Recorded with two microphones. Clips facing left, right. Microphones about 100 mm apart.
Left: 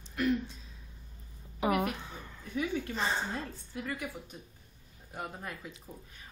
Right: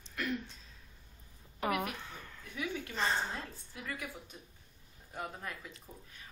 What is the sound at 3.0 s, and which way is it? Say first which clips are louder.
Speech: right 2 dB; 5° left (ahead or behind).